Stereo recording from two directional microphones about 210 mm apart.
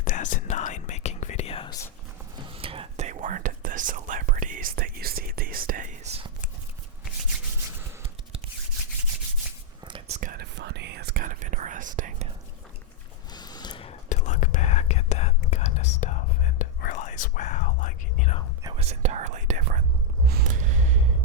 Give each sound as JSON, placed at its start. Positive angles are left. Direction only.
{"t": 0.0, "sound": "whispering", "side_deg": 40}
{"t": 2.5, "sound": "whispering", "side_deg": -25}
{"t": 9.8, "sound": "whispering", "side_deg": -25}
{"t": 10.2, "sound": "whispering", "side_deg": -40}
{"t": 10.5, "sound": "whispering", "side_deg": -50}
{"t": 13.3, "sound": "whispering", "side_deg": 20}
{"t": 18.6, "sound": "whispering", "side_deg": -25}
{"t": 20.2, "sound": "a sound", "side_deg": -45}